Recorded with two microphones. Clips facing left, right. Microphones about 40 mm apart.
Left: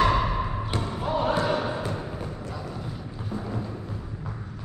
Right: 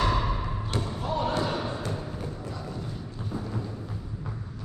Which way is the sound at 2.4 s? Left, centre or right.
Centre.